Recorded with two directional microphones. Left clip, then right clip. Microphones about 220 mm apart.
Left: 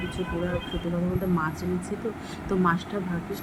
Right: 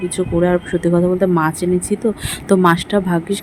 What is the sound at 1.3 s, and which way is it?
Speech, 40° right (ahead or behind).